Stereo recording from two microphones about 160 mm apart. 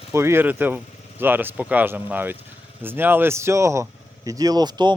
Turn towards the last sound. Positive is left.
turn(degrees=-25)  # may be behind; listen again after turning